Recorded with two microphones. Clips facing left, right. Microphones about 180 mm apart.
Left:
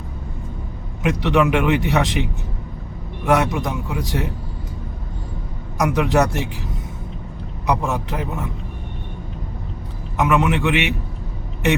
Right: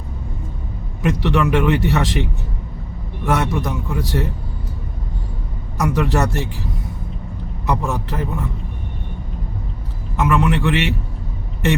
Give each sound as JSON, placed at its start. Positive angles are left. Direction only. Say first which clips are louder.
{"t": 1.0, "sound": "speech", "louder": "left 1 dB", "side_deg": 15}
{"t": 3.2, "sound": "speech", "louder": "left 2 dB", "side_deg": 15}
{"t": 5.7, "sound": "speech", "louder": "left 2 dB", "side_deg": 15}
{"t": 7.7, "sound": "speech", "louder": "left 1 dB", "side_deg": 20}
{"t": 10.2, "sound": "a man's voice", "louder": "even", "side_deg": 20}